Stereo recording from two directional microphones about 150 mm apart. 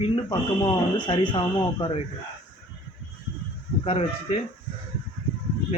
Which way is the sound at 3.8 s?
40° left (ahead or behind).